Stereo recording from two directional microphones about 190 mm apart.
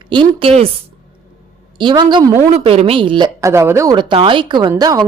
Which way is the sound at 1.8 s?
25° right (ahead or behind).